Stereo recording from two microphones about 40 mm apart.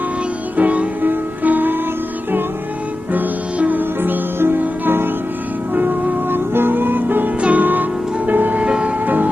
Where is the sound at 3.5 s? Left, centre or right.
Right.